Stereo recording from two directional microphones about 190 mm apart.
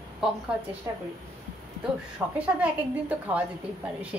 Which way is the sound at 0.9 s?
15° right (ahead or behind).